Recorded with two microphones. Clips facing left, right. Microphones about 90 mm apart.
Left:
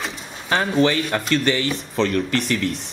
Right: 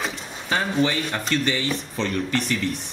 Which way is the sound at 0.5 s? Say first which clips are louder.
Left 4 dB; 90° left.